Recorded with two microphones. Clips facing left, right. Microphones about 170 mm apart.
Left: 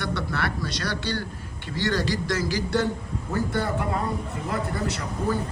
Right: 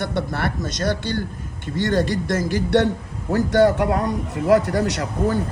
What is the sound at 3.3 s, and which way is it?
A man's voice, 75° right (ahead or behind).